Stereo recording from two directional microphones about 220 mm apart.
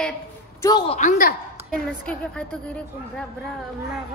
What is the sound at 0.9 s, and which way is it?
Speech, 35° left (ahead or behind).